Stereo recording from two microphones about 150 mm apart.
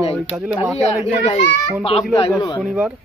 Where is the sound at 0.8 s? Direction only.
50° left (ahead or behind).